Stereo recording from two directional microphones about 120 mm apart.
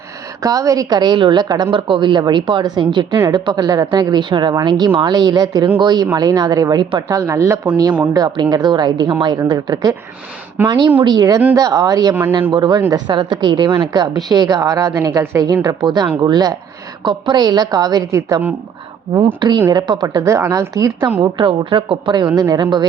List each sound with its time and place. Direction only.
0.4 s speech: 30° right (ahead or behind)
12.3 s speech: 45° right (ahead or behind); by 15.4 s 25° right (ahead or behind)
15.6 s speech: 35° right (ahead or behind)
21.3 s speech: 45° right (ahead or behind)